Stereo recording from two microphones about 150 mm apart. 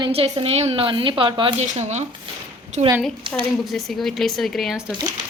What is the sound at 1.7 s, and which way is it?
Speech, 50° right (ahead or behind).